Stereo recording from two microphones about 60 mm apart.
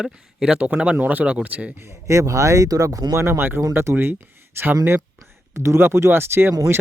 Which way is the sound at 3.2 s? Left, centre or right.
Right.